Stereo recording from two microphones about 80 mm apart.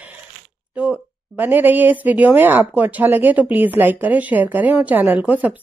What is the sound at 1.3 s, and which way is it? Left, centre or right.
Speech, right.